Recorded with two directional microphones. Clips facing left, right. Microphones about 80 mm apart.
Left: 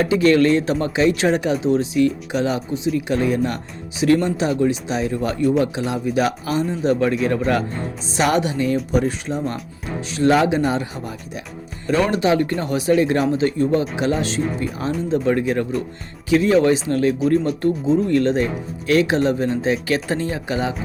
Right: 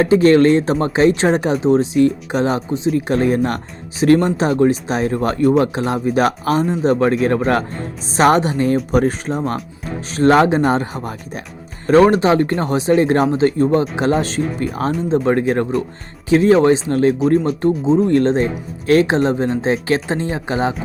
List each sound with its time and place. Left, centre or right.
0.0 s speech: right
17.6 s speech: right
18.0 s speech: right